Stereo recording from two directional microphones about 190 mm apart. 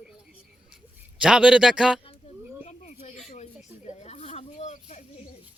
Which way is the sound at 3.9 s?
35° left (ahead or behind).